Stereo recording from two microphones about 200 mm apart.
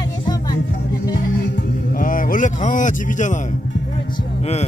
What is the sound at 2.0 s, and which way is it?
Speech, 45° left (ahead or behind).